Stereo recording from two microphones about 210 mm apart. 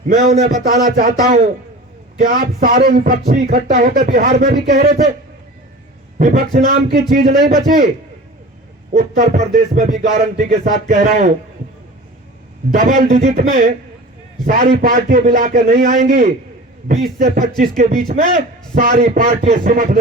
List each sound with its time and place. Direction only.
0.2 s speech: 35° right (ahead or behind)
6.1 s speech: 40° right (ahead or behind)
8.9 s speech: 35° right (ahead or behind)
12.7 s speech: 40° right (ahead or behind)
17.6 s speech: 40° right (ahead or behind)
19.6 s speech: 45° right (ahead or behind)